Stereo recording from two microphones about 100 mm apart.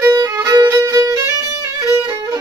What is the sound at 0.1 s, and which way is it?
Violin, 35° right (ahead or behind).